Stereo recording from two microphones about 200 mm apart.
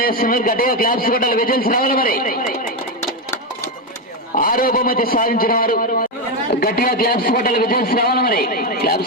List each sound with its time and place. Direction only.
0.0 s a man's voice: 45° left (ahead or behind)
4.4 s a man's voice: 45° left (ahead or behind)